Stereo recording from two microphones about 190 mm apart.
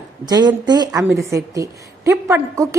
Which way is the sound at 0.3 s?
20° right (ahead or behind).